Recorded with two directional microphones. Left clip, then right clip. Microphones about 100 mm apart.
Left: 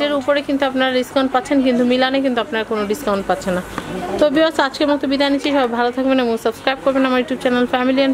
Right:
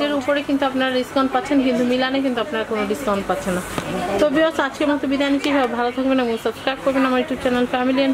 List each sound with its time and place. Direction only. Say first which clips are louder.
0.0 s a woman's voice: left 3 dB; 50° left (ahead or behind)